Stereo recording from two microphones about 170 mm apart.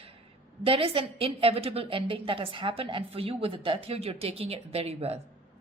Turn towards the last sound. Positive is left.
turn(degrees=-35)  # may be behind; listen again after turning